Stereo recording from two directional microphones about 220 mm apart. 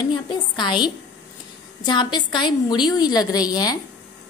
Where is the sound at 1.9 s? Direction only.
20° left (ahead or behind).